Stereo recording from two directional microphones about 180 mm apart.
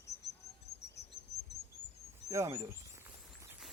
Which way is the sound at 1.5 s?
Centre (ahead or behind).